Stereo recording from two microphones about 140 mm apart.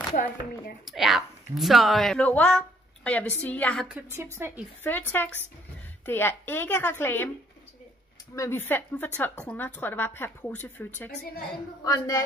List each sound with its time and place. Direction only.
0.1 s speech: 80° left
0.8 s speech: centre (ahead or behind)
3.9 s a woman's voice: 15° right (ahead or behind)
4.8 s speech: 15° left (ahead or behind)
8.4 s speech: 15° left (ahead or behind)
11.8 s a woman's voice: 25° left (ahead or behind)